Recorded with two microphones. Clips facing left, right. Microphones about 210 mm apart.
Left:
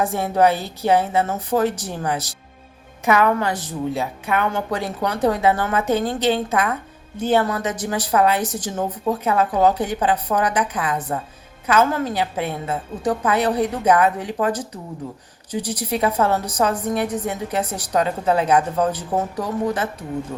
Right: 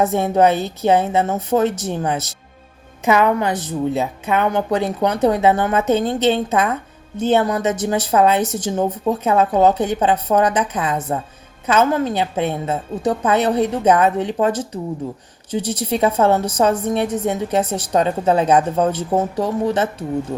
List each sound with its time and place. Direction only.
0.0 s a woman's voice: 20° right (ahead or behind)